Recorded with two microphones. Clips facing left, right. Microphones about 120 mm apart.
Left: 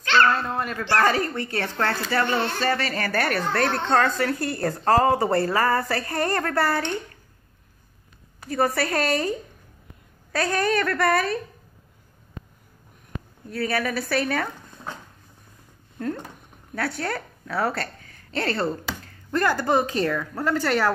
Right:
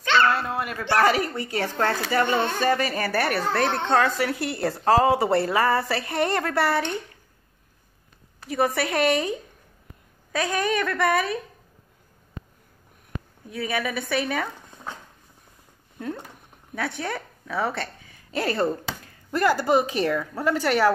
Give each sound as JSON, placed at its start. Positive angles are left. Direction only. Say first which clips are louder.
{"t": 0.3, "sound": "speech", "louder": "left 1 dB", "side_deg": -10}
{"t": 3.6, "sound": "a woman's voice", "louder": "even", "side_deg": -20}
{"t": 3.9, "sound": "speech", "louder": "left 1 dB", "side_deg": -10}
{"t": 8.5, "sound": "speech", "louder": "left 1 dB", "side_deg": -5}
{"t": 10.5, "sound": "speech", "louder": "left 2 dB", "side_deg": 0}
{"t": 13.5, "sound": "speech", "louder": "left 3 dB", "side_deg": -15}
{"t": 13.7, "sound": "speech", "louder": "even", "side_deg": 0}
{"t": 17.1, "sound": "speech", "louder": "left 1 dB", "side_deg": 0}
{"t": 18.0, "sound": "a woman's voice", "louder": "right 1 dB", "side_deg": -10}